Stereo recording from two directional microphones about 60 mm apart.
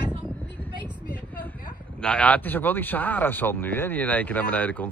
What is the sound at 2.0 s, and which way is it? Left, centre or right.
Speech, left.